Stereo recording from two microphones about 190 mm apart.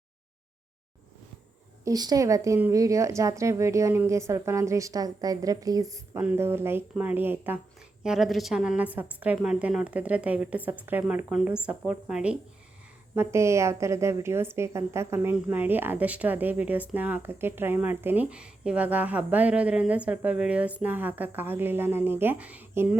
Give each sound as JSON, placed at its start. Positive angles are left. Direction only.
{"t": 1.8, "sound": "a woman's voice", "side_deg": -20}